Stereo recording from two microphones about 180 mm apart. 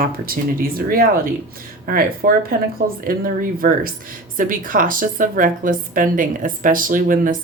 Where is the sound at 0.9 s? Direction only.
50° right (ahead or behind).